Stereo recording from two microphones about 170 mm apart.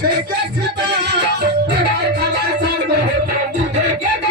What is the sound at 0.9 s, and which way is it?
Music, 75° right (ahead or behind).